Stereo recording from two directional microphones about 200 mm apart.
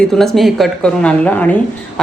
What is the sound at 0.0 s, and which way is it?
A woman's voice, centre (ahead or behind).